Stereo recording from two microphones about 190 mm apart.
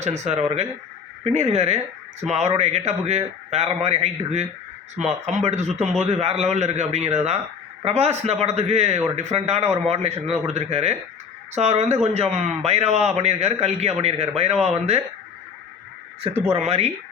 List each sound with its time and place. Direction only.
0.0 s a man's voice: 35° right (ahead or behind)
16.5 s a man's voice: 35° right (ahead or behind)